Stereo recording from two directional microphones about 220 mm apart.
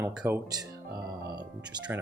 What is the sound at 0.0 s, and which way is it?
Speech, 5° right (ahead or behind).